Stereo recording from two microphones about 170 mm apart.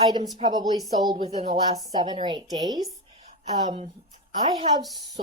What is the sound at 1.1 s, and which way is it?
Speech, 40° right (ahead or behind).